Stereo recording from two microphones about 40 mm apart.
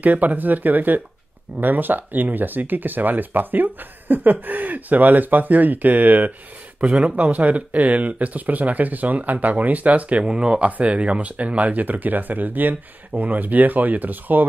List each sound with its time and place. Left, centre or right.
0.0 s speech: right
7.0 s speech: right